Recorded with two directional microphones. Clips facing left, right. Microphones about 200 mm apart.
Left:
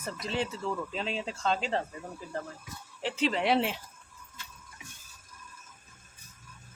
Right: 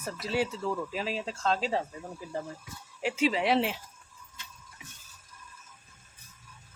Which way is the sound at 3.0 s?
10° right (ahead or behind).